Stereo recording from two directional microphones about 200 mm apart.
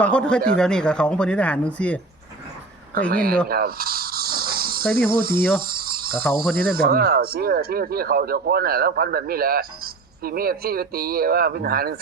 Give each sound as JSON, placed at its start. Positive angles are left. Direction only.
{"t": 0.0, "sound": "speech", "side_deg": 5}
{"t": 3.1, "sound": "speech", "side_deg": -50}
{"t": 3.5, "sound": "snake", "side_deg": -50}
{"t": 4.9, "sound": "speech", "side_deg": -50}
{"t": 5.6, "sound": "a sound", "side_deg": -50}
{"t": 6.2, "sound": "speech", "side_deg": 0}
{"t": 6.6, "sound": "speech", "side_deg": -50}